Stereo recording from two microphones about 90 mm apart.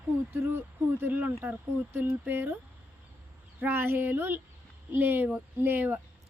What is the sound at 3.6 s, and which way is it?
Speech, 25° right (ahead or behind).